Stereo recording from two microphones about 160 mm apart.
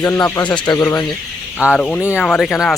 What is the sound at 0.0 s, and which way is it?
Speech, 20° left (ahead or behind).